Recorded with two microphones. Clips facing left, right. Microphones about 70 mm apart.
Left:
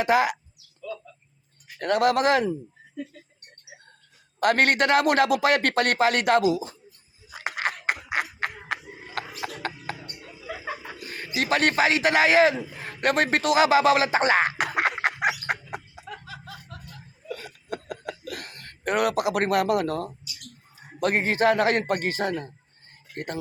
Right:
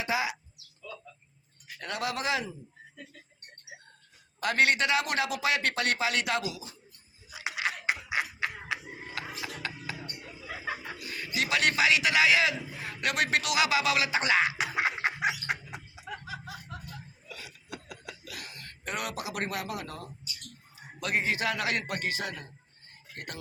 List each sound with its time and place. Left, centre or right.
0.0 s speech: left
1.8 s a man's voice: left
4.4 s a man's voice: left
7.3 s a sound: left
9.4 s music: left
10.9 s a sound: left
11.3 s a man's voice: left
16.0 s music: centre
17.2 s chuckle: left
21.0 s a man's voice: left